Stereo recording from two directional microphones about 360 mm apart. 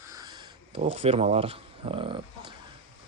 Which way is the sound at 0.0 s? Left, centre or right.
Centre.